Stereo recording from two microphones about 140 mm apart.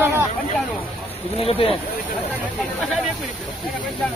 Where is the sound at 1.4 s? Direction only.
45° left (ahead or behind).